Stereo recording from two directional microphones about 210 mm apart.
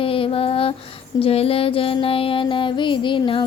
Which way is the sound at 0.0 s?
25° left (ahead or behind).